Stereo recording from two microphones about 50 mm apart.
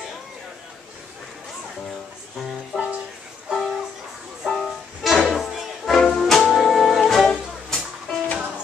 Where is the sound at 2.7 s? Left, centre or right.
Centre.